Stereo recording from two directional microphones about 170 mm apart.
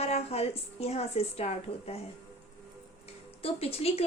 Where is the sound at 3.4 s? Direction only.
35° left (ahead or behind).